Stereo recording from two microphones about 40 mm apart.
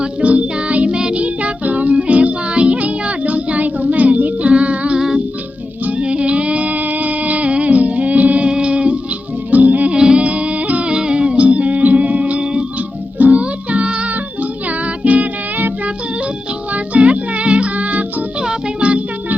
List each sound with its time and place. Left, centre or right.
0.0 s music: right
1.2 s music: right
3.8 s child singing: right
4.9 s music: centre
6.0 s music: right
8.4 s music: right
9.9 s music: centre
10.2 s music: right
10.9 s music: right
15.0 s music: right
16.7 s music: right